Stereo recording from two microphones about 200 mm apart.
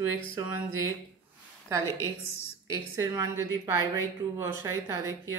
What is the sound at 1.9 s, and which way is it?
Speech, 15° left (ahead or behind).